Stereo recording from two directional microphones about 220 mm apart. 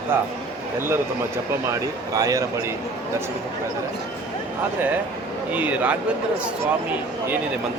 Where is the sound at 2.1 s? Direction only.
15° right (ahead or behind).